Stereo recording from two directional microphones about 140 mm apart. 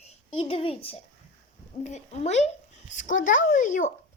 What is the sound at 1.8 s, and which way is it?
Speech, 55° left (ahead or behind).